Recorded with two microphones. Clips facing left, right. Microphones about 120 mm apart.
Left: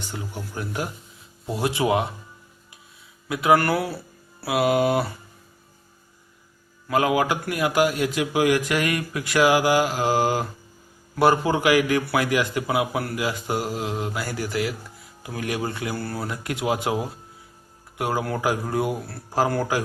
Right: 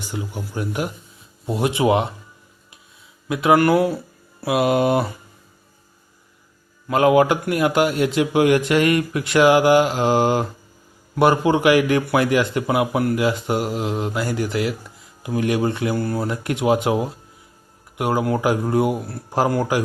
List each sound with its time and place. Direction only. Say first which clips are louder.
0.0 s a man's voice: right 4 dB; 15° right (ahead or behind)
3.2 s a man's voice: right 4 dB; 25° right (ahead or behind)
6.8 s a man's voice: right 6 dB; 25° right (ahead or behind)